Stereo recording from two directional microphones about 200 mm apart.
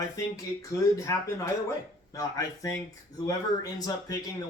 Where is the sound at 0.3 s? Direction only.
15° left (ahead or behind).